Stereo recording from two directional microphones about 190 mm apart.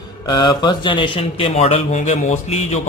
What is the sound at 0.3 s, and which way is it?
A man's voice, 25° left (ahead or behind).